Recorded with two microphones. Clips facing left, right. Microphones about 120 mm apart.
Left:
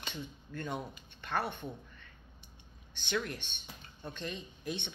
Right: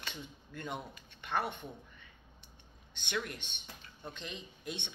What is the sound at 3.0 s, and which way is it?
Speech, 40° left (ahead or behind).